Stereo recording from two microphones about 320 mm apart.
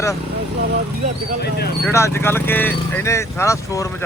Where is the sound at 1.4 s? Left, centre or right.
Left.